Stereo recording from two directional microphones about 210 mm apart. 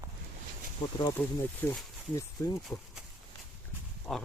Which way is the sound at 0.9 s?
15° left (ahead or behind).